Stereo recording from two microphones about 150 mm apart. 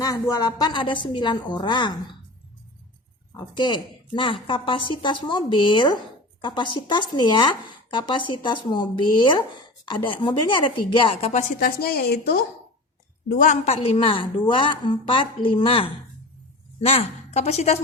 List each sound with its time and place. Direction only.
0.0 s a woman's voice: 25° left (ahead or behind)
3.3 s a woman's voice: 30° left (ahead or behind)
11.3 s a woman's voice: 60° left (ahead or behind); by 12.4 s 90° left
13.2 s a woman's voice: 65° left (ahead or behind)
13.7 s a woman's voice: 35° left (ahead or behind)
16.8 s speech: 45° left (ahead or behind)